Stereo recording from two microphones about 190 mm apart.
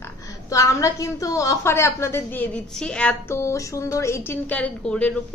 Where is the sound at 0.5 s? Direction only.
15° left (ahead or behind).